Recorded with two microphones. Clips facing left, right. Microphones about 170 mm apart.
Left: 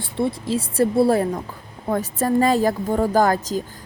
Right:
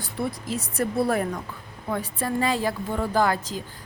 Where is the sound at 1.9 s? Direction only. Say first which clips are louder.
Left 7 dB; 40° left (ahead or behind).